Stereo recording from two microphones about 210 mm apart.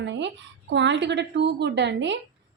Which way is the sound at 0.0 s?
55° right (ahead or behind).